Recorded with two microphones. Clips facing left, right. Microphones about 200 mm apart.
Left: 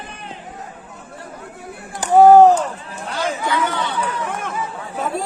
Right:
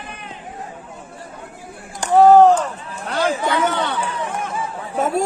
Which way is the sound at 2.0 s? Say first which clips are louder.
Left 1 dB; 5° left (ahead or behind).